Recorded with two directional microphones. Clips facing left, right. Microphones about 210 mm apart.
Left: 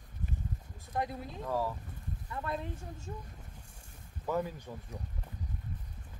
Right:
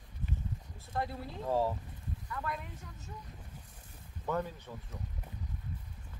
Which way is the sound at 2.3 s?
30° left (ahead or behind).